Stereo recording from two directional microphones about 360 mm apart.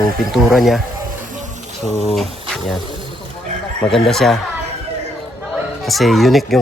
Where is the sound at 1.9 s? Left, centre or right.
Centre.